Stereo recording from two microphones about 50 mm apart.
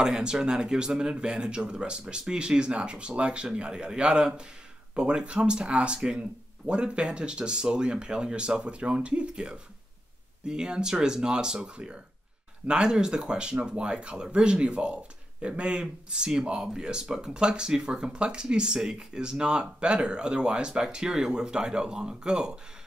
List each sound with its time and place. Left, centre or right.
0.0 s speech: centre